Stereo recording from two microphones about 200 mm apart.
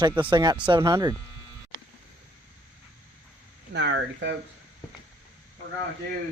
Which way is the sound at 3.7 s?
65° right (ahead or behind).